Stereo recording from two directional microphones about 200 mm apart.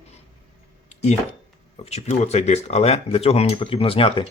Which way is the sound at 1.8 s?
35° left (ahead or behind).